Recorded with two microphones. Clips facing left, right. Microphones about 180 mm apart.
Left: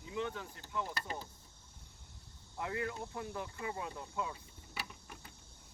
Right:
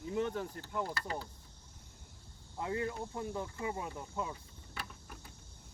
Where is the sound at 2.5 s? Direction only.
25° right (ahead or behind).